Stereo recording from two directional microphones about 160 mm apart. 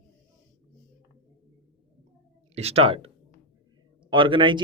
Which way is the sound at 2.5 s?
40° right (ahead or behind).